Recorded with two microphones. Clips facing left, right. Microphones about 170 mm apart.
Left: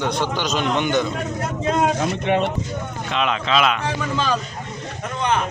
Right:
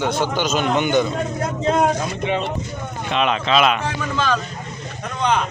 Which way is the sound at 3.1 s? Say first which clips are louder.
Right 2 dB; 20° right (ahead or behind).